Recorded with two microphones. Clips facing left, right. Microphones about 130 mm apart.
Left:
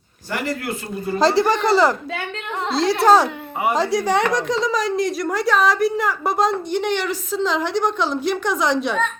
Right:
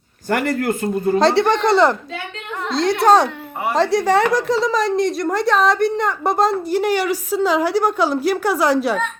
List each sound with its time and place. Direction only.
0.3 s speech: 50° right (ahead or behind)
1.2 s a woman's voice: centre (ahead or behind)
3.0 s a woman's voice: 5° left (ahead or behind)